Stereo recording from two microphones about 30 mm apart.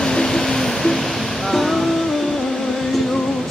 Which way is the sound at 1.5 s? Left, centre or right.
Centre.